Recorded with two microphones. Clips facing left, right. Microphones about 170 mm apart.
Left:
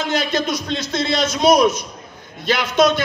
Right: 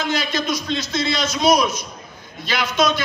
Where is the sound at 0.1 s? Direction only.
60° left (ahead or behind).